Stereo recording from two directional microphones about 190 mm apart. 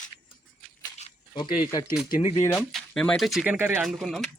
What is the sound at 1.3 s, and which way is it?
Speech, 20° left (ahead or behind).